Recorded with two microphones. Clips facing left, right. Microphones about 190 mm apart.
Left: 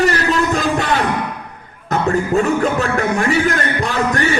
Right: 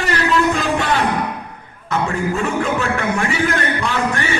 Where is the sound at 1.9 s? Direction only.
40° left (ahead or behind).